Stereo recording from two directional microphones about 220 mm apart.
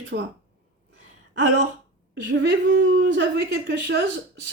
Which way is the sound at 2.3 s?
50° right (ahead or behind).